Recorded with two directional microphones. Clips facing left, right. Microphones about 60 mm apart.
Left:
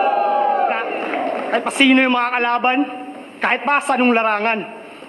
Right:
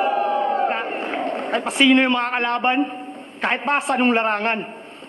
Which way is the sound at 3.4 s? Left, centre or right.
Left.